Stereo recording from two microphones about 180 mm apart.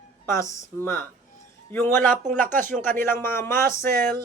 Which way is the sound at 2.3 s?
45° right (ahead or behind).